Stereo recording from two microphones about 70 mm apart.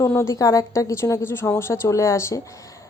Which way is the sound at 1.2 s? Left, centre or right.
Left.